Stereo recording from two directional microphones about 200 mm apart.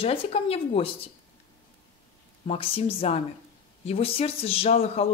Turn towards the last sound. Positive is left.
turn(degrees=30)  # may be behind; listen again after turning